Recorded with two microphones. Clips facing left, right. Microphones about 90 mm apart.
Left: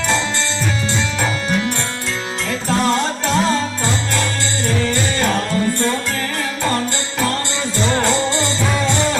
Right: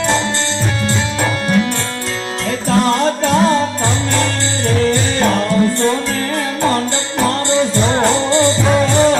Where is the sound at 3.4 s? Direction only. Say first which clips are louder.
Right 4 dB; 30° right (ahead or behind).